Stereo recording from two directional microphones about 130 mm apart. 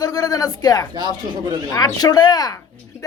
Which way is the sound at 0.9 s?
35° right (ahead or behind).